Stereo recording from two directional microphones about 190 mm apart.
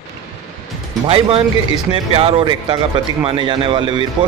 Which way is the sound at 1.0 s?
30° right (ahead or behind).